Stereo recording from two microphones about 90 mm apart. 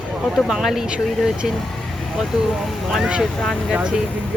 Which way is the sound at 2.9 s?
5° right (ahead or behind).